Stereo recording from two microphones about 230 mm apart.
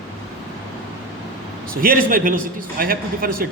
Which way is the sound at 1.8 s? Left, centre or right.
Right.